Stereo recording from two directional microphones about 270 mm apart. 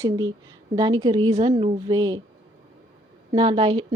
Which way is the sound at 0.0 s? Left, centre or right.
Centre.